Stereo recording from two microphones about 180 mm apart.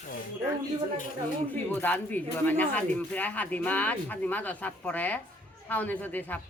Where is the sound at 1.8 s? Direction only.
10° left (ahead or behind).